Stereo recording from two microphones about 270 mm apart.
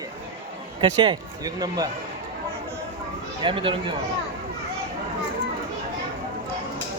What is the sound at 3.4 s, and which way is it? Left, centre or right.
Speech, centre.